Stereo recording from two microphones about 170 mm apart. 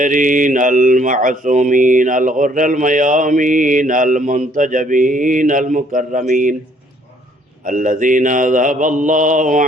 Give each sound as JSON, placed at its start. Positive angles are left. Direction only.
{"t": 0.0, "sound": "speech", "side_deg": -50}
{"t": 7.6, "sound": "speech", "side_deg": -50}